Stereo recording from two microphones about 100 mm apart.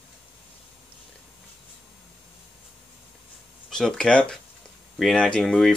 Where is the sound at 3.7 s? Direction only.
5° left (ahead or behind).